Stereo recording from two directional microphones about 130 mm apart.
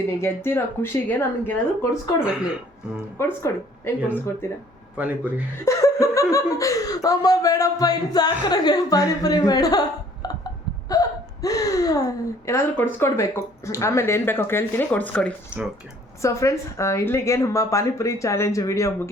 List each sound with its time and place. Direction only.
0.2 s speech: 20° left (ahead or behind)
3.2 s speech: 20° left (ahead or behind)
10.2 s hiccup: 30° left (ahead or behind)
10.9 s gasp: 25° left (ahead or behind)
11.4 s speech: 25° left (ahead or behind); by 15.3 s 10° left (ahead or behind)
16.2 s speech: 25° left (ahead or behind)